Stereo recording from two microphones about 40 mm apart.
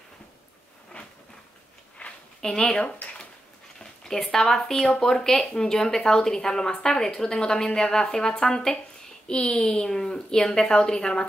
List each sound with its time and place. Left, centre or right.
2.0 s a sound: left
2.4 s a woman's voice: centre
3.8 s speech: centre
4.7 s speech: left
5.1 s a woman's voice: centre